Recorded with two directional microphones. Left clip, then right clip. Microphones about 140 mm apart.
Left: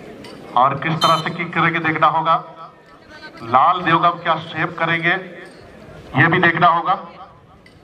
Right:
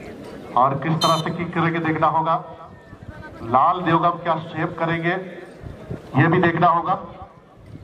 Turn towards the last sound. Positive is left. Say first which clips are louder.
# left 3 dB
turn(degrees=30)  # may be behind; listen again after turning